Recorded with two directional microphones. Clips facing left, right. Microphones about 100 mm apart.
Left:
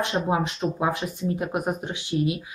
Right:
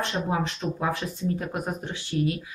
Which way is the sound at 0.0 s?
15° left (ahead or behind).